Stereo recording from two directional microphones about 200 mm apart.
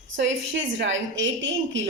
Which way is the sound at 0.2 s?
65° right (ahead or behind).